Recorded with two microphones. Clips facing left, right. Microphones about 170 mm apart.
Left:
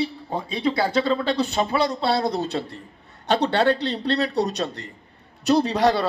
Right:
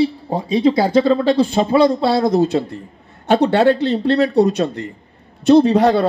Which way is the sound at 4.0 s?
50° right (ahead or behind).